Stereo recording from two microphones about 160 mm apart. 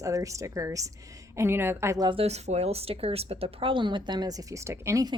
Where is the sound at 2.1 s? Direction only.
40° right (ahead or behind).